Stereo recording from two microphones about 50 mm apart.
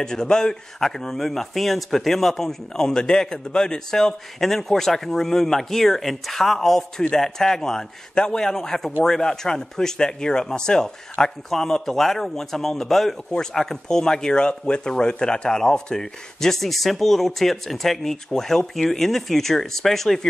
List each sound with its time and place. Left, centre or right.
0.0 s speech: centre